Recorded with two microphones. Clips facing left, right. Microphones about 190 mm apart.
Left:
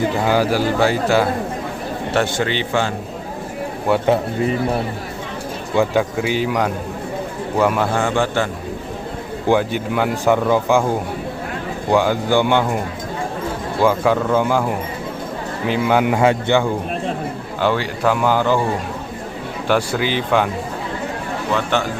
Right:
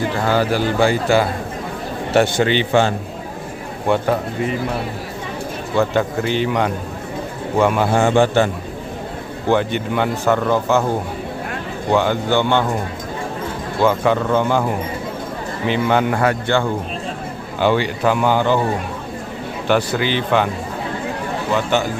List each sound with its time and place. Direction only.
0.3 s speech: 10° left (ahead or behind)
2.1 s speech: 20° right (ahead or behind)
3.9 s speech: 5° left (ahead or behind)
5.7 s speech: 10° left (ahead or behind)
7.9 s speech: 25° right (ahead or behind)
9.5 s speech: 5° left (ahead or behind)
11.9 s speech: 10° left (ahead or behind)
13.8 s speech: 5° left (ahead or behind)
17.6 s speech: centre (ahead or behind)
19.6 s speech: 5° left (ahead or behind)
21.5 s speech: 5° right (ahead or behind)